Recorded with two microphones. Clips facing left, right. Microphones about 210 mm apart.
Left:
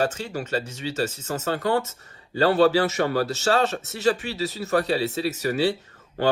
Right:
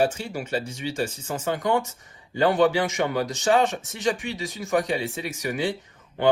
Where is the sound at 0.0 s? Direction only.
10° right (ahead or behind).